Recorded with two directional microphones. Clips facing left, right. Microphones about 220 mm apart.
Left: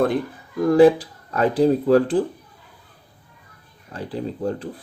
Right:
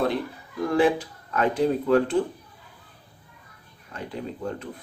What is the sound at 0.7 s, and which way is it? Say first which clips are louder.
Speech: left 8 dB; 40° left (ahead or behind).